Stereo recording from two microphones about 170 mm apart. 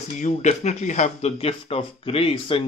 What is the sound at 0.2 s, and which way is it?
Speech, 45° left (ahead or behind).